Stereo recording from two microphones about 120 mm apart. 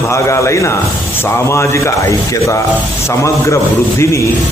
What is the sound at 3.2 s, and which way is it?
A man's voice, 25° left (ahead or behind).